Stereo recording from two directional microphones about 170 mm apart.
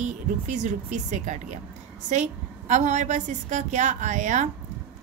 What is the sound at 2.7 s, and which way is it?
A woman's voice, 45° right (ahead or behind).